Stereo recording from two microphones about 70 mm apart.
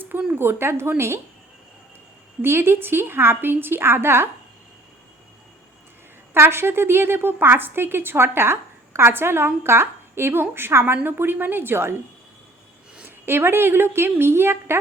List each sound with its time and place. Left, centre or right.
0.3 s a woman's voice: right
2.4 s a woman's voice: right
6.3 s a woman's voice: right
13.0 s a woman's voice: right